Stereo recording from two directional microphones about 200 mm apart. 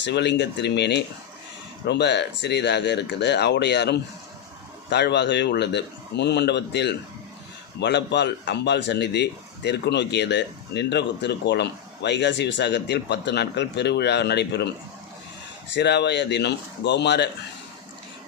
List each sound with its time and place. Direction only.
0.0 s a man's voice: 60° left (ahead or behind)
15.7 s a man's voice: 60° left (ahead or behind)